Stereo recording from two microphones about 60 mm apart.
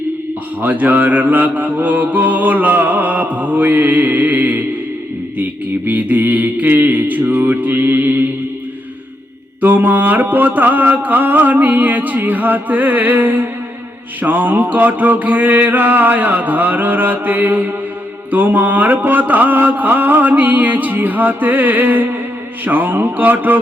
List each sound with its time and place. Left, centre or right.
0.6 s mantra: right
9.6 s mantra: right